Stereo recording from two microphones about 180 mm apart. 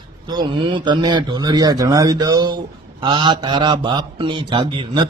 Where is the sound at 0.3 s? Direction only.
25° right (ahead or behind).